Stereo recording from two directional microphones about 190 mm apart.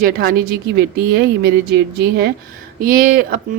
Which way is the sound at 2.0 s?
60° right (ahead or behind).